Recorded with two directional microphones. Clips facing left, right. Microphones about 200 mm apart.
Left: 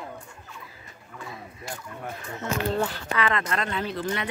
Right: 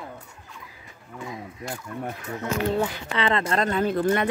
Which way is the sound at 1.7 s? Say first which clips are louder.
Right 3 dB; 10° right (ahead or behind).